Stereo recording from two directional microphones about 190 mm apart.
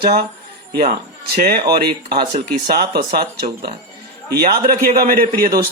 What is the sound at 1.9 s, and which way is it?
Speech, 25° right (ahead or behind).